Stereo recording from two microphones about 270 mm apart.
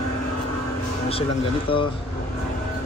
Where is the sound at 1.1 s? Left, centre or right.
Centre.